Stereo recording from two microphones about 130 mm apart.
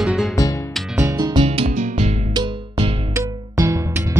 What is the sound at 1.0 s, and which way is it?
Music, 25° right (ahead or behind).